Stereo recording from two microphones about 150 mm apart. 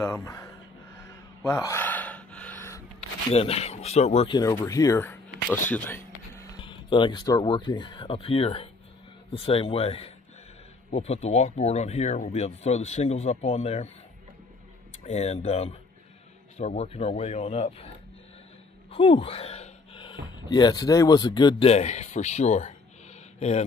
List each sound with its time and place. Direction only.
0.0 s a sound: 20° left (ahead or behind)
3.3 s speech: 40° left (ahead or behind)
4.3 s speech: 25° left (ahead or behind)
6.6 s speech: 35° left (ahead or behind)
15.0 s speech: 45° left (ahead or behind)
18.9 s a sound: 40° left (ahead or behind)
20.3 s speech: 30° left (ahead or behind)
21.6 s speech: 50° left (ahead or behind)